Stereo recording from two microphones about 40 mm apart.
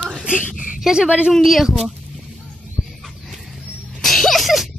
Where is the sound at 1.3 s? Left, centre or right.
Centre.